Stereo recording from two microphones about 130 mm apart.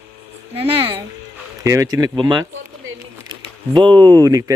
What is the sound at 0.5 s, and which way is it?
Speech, 45° right (ahead or behind).